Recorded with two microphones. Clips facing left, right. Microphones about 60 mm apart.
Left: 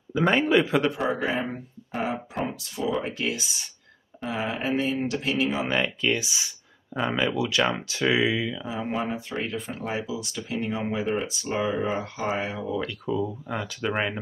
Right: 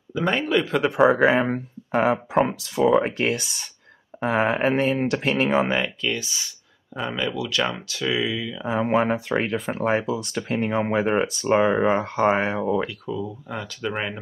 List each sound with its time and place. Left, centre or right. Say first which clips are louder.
0.1 s a man's voice: left 1 dB; centre
0.9 s speech: right 9 dB; right
6.1 s a man's voice: left 1 dB; centre
8.6 s speech: right 8 dB; right
13.0 s a man's voice: left 2 dB; centre
13.8 s speech: left 1 dB; centre